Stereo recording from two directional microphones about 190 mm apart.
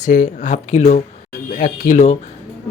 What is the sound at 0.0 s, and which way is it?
A man's voice, 40° left (ahead or behind).